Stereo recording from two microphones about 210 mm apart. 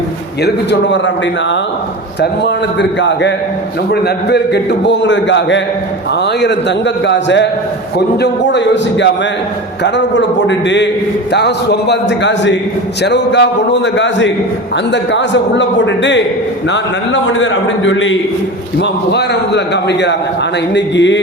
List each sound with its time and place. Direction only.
0.4 s a man's voice: 55° left (ahead or behind)
2.2 s a man's voice: 55° left (ahead or behind)